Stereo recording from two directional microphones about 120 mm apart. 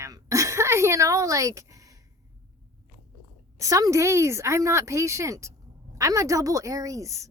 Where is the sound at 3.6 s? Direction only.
30° right (ahead or behind).